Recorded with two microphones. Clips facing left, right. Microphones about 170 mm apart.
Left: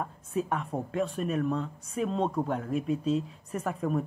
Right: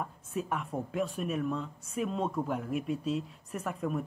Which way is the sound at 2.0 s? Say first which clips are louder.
Left 4 dB; 30° left (ahead or behind).